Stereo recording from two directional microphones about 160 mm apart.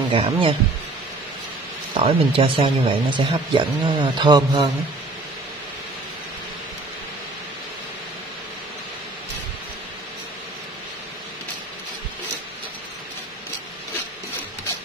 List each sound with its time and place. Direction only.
0.1 s speech: 35° right (ahead or behind)
2.0 s speech: 35° right (ahead or behind)